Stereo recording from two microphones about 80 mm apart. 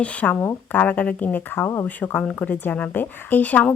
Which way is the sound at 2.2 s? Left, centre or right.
Centre.